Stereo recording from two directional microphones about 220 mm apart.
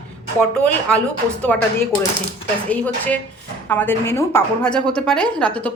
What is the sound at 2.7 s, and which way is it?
A woman's voice, 5° left (ahead or behind).